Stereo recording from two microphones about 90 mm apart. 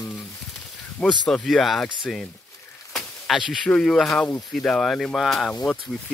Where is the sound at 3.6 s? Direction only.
10° left (ahead or behind).